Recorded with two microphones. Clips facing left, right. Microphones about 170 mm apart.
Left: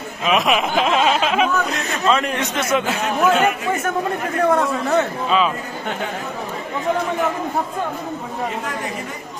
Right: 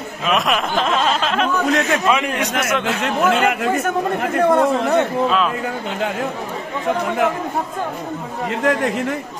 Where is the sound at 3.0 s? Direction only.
75° right (ahead or behind).